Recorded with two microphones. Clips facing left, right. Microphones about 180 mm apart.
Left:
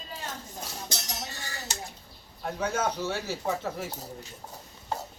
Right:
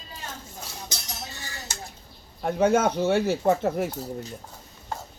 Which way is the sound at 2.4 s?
55° right (ahead or behind).